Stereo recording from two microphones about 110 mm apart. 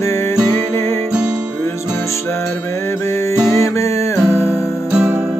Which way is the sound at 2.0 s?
25° left (ahead or behind).